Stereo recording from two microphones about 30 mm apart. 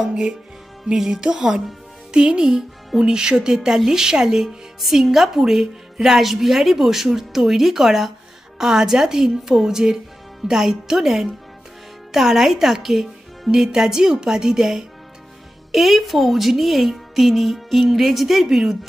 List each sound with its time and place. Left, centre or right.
0.1 s music: right
0.9 s speech: centre
1.2 s speech: right
3.7 s a woman's voice: centre
15.7 s a woman's voice: centre